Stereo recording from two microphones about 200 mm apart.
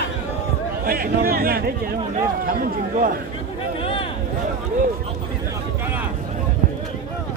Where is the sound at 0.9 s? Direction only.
45° right (ahead or behind).